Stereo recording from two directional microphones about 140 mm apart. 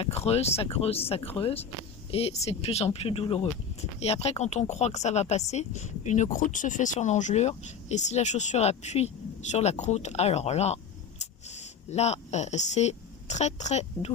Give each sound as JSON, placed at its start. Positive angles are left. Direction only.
{"t": 0.0, "sound": "a woman's voice", "side_deg": 45}